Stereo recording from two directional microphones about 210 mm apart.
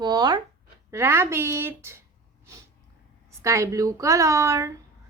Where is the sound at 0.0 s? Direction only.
20° right (ahead or behind).